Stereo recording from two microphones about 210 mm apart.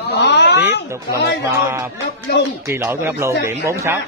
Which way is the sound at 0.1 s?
55° left (ahead or behind).